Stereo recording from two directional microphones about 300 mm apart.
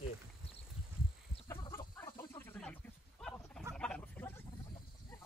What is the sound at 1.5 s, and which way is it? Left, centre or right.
Chicken, centre.